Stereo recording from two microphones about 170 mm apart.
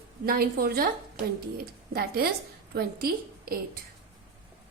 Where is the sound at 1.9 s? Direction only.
65° right (ahead or behind).